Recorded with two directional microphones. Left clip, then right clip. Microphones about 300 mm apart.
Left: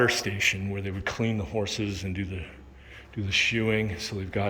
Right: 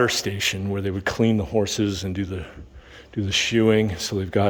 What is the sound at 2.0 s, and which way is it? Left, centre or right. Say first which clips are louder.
Speech: right 6 dB; centre.